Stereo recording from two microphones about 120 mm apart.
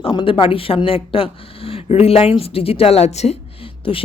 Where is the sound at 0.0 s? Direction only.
45° left (ahead or behind).